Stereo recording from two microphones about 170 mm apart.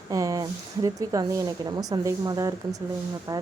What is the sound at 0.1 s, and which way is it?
Speech, 20° right (ahead or behind).